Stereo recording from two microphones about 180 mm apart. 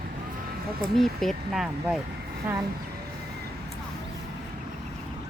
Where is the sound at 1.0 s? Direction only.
Centre (ahead or behind).